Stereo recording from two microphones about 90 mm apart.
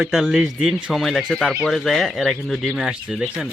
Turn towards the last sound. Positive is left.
turn(degrees=-5)  # may be behind; listen again after turning